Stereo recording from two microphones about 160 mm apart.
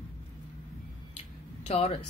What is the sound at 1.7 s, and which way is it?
Speech, 40° left (ahead or behind).